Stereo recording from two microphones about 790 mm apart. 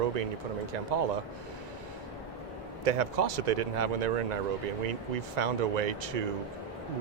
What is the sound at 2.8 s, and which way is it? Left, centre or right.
Speech, right.